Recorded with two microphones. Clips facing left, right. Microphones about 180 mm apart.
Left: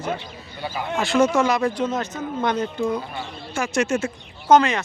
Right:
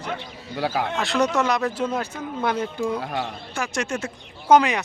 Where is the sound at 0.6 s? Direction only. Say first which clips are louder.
Right 5 dB; 90° right.